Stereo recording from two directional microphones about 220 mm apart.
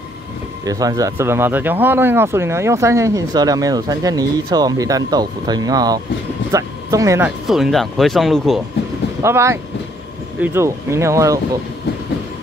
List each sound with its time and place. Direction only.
0.7 s speech: 15° right (ahead or behind); by 8.5 s centre (ahead or behind)
9.2 s speech: 10° right (ahead or behind)